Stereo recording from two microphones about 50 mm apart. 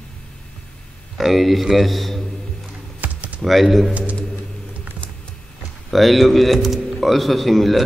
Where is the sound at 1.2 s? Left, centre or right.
Centre.